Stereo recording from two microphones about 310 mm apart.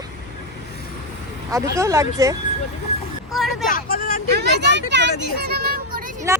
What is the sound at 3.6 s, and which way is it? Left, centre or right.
Speech, left.